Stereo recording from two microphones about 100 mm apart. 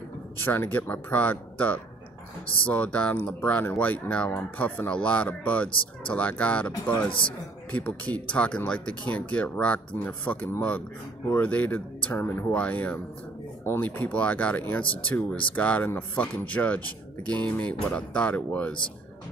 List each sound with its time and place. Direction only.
0.4 s speech: 20° left (ahead or behind)
7.1 s a man's voice: 60° left (ahead or behind)
7.7 s speech: 15° left (ahead or behind)